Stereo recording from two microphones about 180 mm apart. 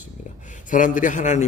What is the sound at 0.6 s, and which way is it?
Speech, 45° left (ahead or behind).